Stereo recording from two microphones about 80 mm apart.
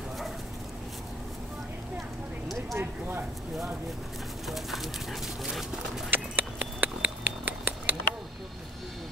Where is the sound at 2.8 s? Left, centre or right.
Right.